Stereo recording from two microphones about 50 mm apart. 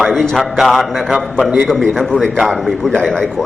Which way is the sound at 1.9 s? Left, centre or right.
Centre.